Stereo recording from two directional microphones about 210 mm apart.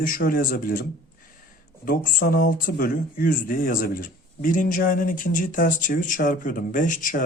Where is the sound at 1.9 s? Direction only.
40° left (ahead or behind).